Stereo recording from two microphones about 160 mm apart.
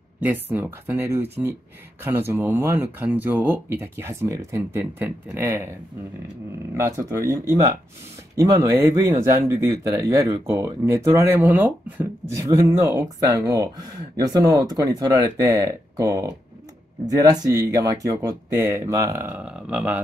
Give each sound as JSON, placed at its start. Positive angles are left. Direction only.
{"t": 0.2, "sound": "speech", "side_deg": -10}
{"t": 6.7, "sound": "speech", "side_deg": -20}